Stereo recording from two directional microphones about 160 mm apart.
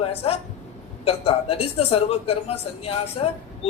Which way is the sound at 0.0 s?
40° left (ahead or behind).